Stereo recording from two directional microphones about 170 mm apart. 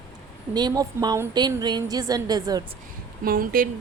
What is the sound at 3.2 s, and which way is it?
Speech, 55° right (ahead or behind).